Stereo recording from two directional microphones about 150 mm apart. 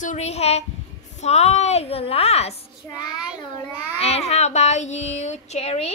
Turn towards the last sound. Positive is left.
turn(degrees=45)  # may be behind; listen again after turning